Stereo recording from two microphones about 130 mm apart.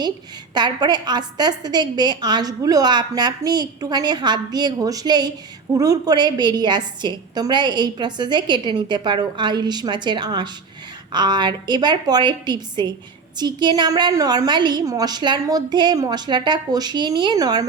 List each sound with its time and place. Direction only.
0.5 s a woman's voice: 35° right (ahead or behind)